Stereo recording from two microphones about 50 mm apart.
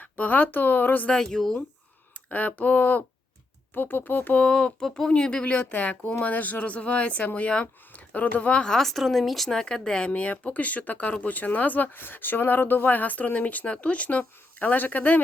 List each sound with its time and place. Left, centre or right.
0.0 s speech: left
1.1 s speech: centre
2.3 s speech: left
4.4 s speech: left
4.8 s speech: centre; by 8.6 s left
8.6 s speech: centre
8.9 s speech: centre
9.5 s speech: centre; by 15.2 s left